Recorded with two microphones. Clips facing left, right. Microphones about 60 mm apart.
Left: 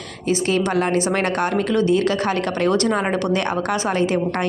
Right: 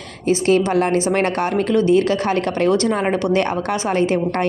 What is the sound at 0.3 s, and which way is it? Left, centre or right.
Speech, right.